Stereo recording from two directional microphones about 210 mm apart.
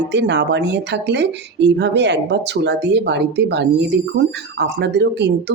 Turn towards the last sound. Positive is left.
turn(degrees=-55)  # may be behind; listen again after turning